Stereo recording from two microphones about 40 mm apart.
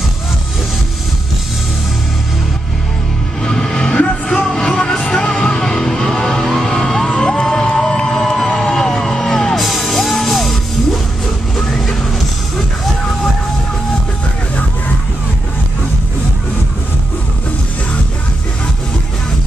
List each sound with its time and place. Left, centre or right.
3.4 s music: centre
7.9 s crowd: centre
8.9 s music: centre